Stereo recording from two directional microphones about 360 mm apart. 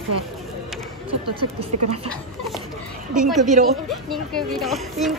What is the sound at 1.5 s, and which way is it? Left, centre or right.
Speech, centre.